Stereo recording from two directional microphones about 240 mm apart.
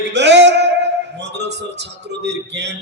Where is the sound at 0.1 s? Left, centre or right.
Right.